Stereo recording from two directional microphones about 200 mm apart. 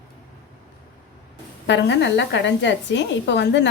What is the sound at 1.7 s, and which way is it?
A woman's voice, 65° left (ahead or behind).